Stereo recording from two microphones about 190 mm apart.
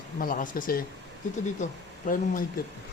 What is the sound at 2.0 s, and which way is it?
Speech, 45° left (ahead or behind).